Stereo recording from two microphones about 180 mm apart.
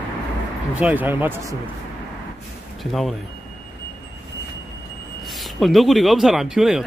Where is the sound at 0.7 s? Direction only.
10° right (ahead or behind).